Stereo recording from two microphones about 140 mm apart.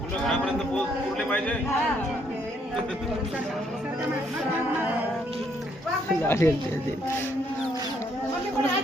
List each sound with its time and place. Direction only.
6.2 s speech: 15° left (ahead or behind)